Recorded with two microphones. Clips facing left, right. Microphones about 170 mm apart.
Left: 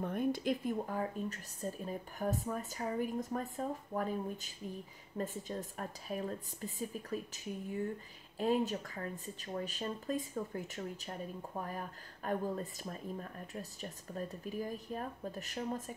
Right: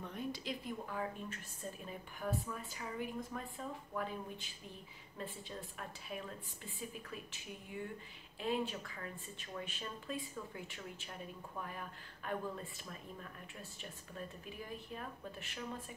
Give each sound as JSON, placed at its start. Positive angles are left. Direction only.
{"t": 0.0, "sound": "a woman's voice", "side_deg": 50}